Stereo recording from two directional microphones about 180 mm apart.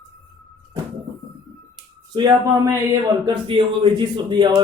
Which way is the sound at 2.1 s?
20° right (ahead or behind).